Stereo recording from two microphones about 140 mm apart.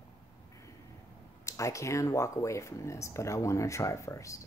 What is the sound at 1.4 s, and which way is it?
Speech, 20° left (ahead or behind).